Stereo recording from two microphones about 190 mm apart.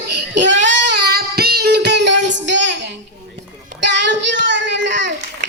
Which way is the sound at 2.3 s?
70° right (ahead or behind).